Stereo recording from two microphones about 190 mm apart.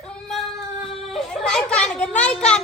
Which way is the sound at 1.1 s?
5° left (ahead or behind).